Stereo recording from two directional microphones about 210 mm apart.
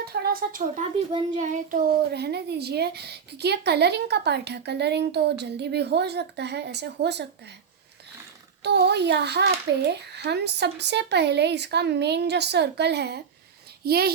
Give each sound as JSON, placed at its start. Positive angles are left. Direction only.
{"t": 0.0, "sound": "a sound", "side_deg": -50}
{"t": 1.1, "sound": "speech", "side_deg": -35}
{"t": 2.1, "sound": "a woman's voice", "side_deg": -50}
{"t": 8.6, "sound": "a woman's voice", "side_deg": -55}